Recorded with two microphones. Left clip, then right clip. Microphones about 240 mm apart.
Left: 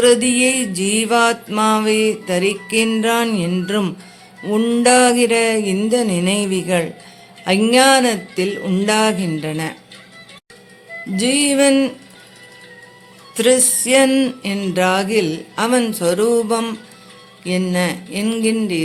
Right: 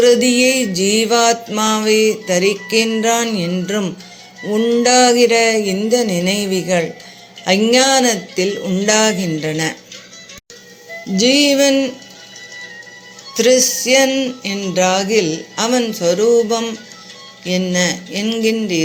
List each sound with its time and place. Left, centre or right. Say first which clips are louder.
0.0 s music: right 2 dB; centre
11.2 s music: right 3 dB; centre
13.3 s music: right 2 dB; centre
14.1 s speech: left 1 dB; centre
17.4 s music: right 2 dB; centre